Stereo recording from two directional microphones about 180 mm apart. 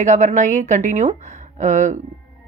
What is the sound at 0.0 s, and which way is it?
Speech, 40° right (ahead or behind).